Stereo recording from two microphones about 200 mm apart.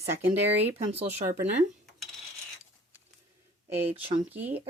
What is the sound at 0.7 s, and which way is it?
Speech, 30° right (ahead or behind).